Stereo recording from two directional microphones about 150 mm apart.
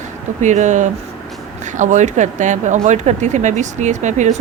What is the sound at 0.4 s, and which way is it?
Speech, 55° right (ahead or behind).